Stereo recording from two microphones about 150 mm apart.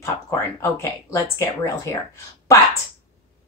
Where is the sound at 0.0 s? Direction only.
15° left (ahead or behind).